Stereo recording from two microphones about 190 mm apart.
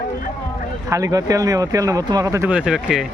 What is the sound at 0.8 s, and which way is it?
Speech, 15° right (ahead or behind).